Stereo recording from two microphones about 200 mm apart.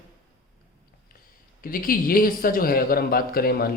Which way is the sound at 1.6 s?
45° left (ahead or behind).